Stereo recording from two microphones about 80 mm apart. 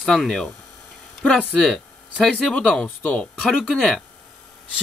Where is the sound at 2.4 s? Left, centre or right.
Centre.